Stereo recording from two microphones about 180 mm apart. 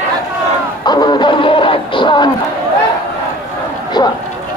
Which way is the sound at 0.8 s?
25° left (ahead or behind).